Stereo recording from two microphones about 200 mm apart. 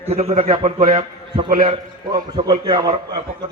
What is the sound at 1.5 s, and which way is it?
Speech, 45° right (ahead or behind).